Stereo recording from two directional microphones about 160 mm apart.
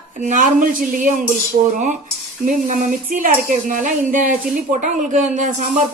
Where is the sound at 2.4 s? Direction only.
50° right (ahead or behind).